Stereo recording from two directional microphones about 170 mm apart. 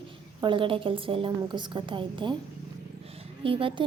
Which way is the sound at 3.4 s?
30° right (ahead or behind).